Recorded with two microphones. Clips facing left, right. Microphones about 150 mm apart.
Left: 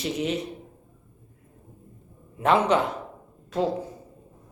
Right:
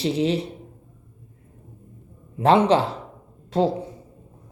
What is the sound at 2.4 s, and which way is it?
A man's voice, 30° right (ahead or behind).